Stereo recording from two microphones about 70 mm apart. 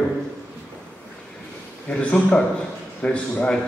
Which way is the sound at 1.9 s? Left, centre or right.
Centre.